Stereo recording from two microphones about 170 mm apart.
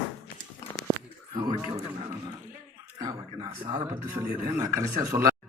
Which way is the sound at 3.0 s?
25° right (ahead or behind).